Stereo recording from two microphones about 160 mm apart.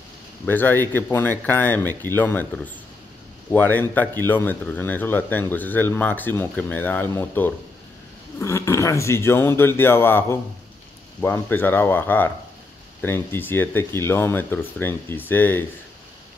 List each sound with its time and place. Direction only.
0.5 s speech: 10° left (ahead or behind)